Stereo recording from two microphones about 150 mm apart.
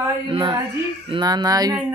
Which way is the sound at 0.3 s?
30° right (ahead or behind).